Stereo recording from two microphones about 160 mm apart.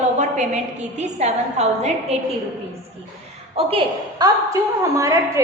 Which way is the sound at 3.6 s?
35° right (ahead or behind).